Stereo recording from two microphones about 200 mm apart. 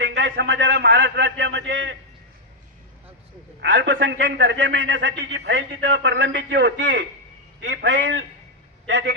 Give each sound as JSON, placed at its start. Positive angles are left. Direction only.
{"t": 0.0, "sound": "a man's voice", "side_deg": -55}
{"t": 3.6, "sound": "a man's voice", "side_deg": -60}